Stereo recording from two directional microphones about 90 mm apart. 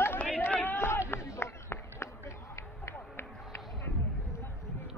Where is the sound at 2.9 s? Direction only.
30° left (ahead or behind).